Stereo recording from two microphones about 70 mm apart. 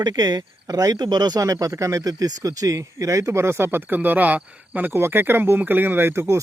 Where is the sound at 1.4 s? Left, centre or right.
Right.